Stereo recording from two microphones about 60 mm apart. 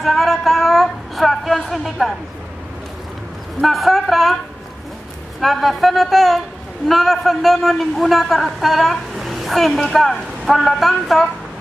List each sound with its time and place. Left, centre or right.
0.0 s speech: centre
3.6 s a man's voice: centre
5.4 s a man's voice: centre